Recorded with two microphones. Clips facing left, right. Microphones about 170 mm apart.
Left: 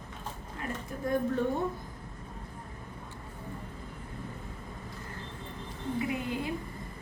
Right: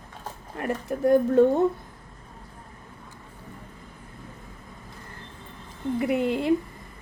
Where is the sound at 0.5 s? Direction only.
65° right (ahead or behind).